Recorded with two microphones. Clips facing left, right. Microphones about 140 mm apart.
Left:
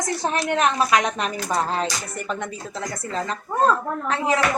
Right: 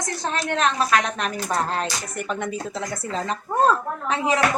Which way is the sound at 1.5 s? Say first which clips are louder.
Left 1 dB; centre (ahead or behind).